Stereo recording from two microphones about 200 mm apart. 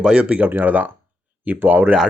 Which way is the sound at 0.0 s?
5° right (ahead or behind).